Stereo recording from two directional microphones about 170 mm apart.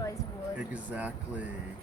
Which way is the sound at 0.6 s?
10° right (ahead or behind).